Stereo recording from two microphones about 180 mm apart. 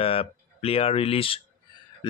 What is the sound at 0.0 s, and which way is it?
Speech, 30° left (ahead or behind).